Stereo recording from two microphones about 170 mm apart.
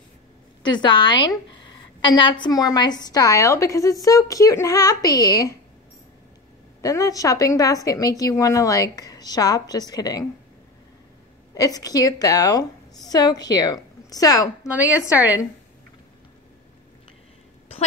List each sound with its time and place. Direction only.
0.6 s a woman's voice: 25° left (ahead or behind)
6.8 s a woman's voice: 20° left (ahead or behind)
11.5 s a woman's voice: 20° left (ahead or behind)
14.7 s a woman's voice: 10° right (ahead or behind)